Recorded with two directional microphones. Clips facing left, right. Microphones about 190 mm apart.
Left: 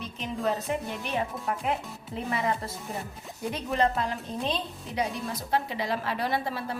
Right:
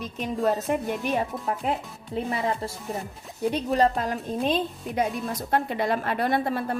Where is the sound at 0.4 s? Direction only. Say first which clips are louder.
Right 5 dB; 45° right (ahead or behind).